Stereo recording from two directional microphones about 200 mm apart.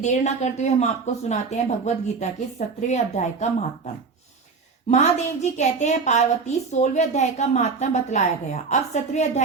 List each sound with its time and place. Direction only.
0.0 s speech: 35° left (ahead or behind)
4.9 s speech: 35° left (ahead or behind)